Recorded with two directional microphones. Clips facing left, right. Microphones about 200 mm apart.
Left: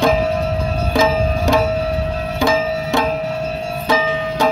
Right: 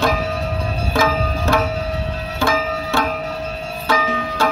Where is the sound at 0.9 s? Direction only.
15° left (ahead or behind).